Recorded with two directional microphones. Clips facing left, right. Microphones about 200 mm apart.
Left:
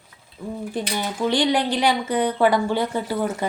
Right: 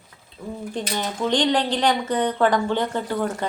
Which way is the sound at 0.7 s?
10° left (ahead or behind).